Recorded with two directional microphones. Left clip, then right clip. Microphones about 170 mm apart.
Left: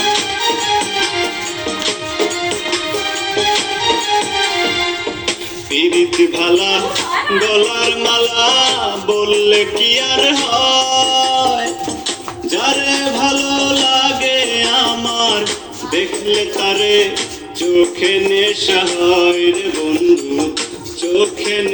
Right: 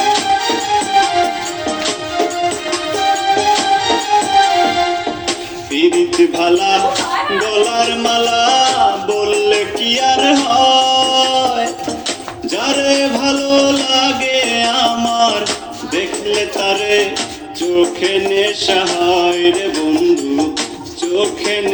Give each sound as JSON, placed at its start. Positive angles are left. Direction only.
{"t": 0.0, "sound": "music", "side_deg": -35}
{"t": 2.6, "sound": "music", "side_deg": -35}
{"t": 5.7, "sound": "a sound", "side_deg": -35}
{"t": 12.5, "sound": "music", "side_deg": -35}